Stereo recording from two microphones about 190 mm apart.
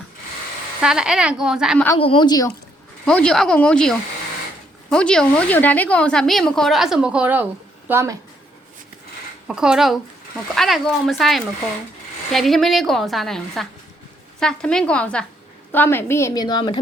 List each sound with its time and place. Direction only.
0.8 s a woman's voice: 5° right (ahead or behind)
2.0 s speech: 25° left (ahead or behind)
3.1 s a woman's voice: 5° left (ahead or behind); by 8.1 s 15° right (ahead or behind)
9.5 s a woman's voice: 5° right (ahead or behind); by 16.7 s 25° left (ahead or behind)